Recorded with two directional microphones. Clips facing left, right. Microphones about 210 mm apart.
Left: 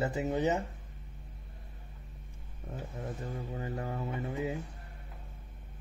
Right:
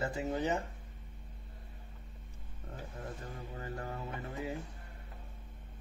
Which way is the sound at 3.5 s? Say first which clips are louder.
Left 3 dB; 20° left (ahead or behind).